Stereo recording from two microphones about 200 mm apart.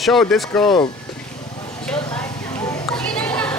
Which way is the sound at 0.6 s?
20° left (ahead or behind).